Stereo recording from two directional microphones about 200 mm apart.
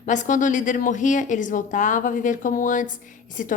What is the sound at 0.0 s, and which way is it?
A woman's voice, 40° left (ahead or behind).